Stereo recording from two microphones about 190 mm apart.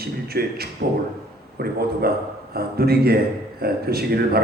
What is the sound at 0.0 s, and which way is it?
Speech, 55° right (ahead or behind).